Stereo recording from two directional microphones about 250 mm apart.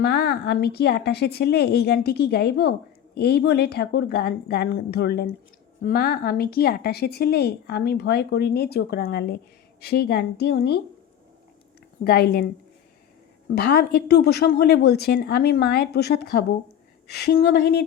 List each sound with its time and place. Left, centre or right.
0.0 s a woman's voice: left
12.0 s a woman's voice: left
13.6 s a woman's voice: left